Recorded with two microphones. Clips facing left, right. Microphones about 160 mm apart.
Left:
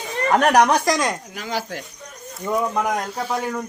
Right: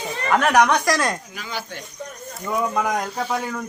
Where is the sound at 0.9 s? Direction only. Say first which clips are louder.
Even; 15° left (ahead or behind).